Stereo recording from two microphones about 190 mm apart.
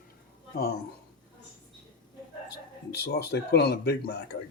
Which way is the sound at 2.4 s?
60° left (ahead or behind).